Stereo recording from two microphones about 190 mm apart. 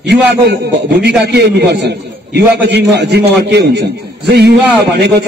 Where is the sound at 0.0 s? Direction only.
65° right (ahead or behind).